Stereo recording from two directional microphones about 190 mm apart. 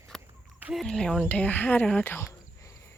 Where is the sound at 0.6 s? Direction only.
Centre (ahead or behind).